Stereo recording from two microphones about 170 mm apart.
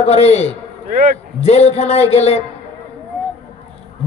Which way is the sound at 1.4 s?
40° left (ahead or behind).